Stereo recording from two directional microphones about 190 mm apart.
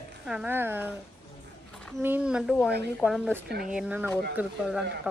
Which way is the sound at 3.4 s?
55° right (ahead or behind).